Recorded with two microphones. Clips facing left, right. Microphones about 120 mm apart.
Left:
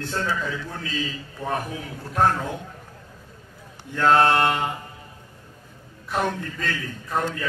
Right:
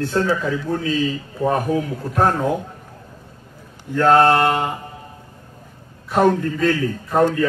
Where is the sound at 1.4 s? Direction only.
40° right (ahead or behind).